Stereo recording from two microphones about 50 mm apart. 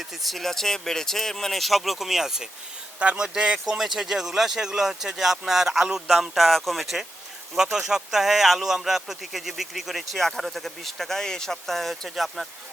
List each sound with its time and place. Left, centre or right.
0.0 s speech: centre
3.0 s speech: right
6.3 s speech: centre